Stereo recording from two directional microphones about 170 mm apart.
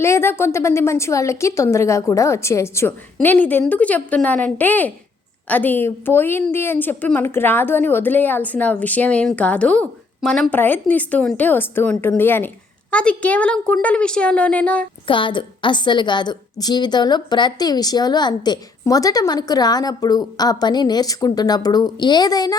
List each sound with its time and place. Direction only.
0.0 s a woman's voice: 15° left (ahead or behind)
15.0 s a woman's voice: 30° left (ahead or behind)